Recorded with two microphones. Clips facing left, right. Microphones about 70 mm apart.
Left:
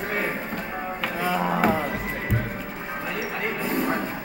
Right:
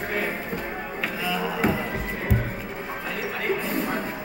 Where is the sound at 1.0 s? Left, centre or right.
Left.